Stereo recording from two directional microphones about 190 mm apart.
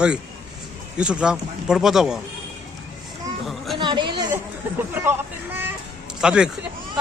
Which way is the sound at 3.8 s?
25° right (ahead or behind).